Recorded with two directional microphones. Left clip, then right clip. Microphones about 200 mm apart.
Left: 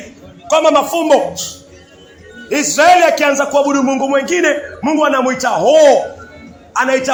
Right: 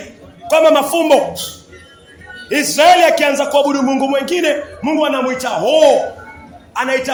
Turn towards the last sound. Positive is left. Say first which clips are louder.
# left 3 dB
turn(degrees=5)  # may be behind; listen again after turning